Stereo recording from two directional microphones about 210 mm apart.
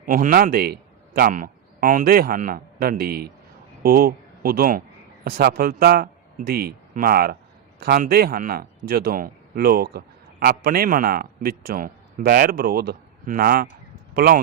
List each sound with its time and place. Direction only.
0.0 s a man's voice: 40° right (ahead or behind)